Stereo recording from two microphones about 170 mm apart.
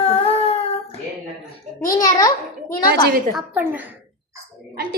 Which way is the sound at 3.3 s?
10° right (ahead or behind).